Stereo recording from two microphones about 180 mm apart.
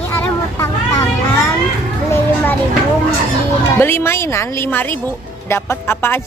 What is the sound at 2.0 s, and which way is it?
Children playing, 15° left (ahead or behind).